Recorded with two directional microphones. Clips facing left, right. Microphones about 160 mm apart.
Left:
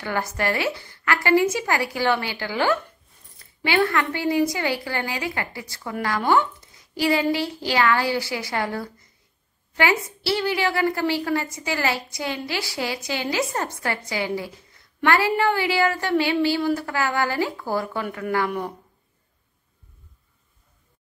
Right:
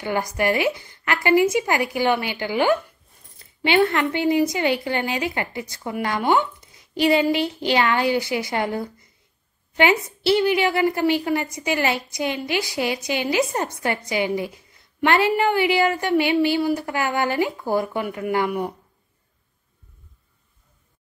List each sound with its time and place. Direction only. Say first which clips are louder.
0.0 s a woman's voice: right 3 dB; 15° right (ahead or behind)